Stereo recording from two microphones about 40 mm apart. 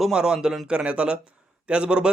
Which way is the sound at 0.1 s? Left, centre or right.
Centre.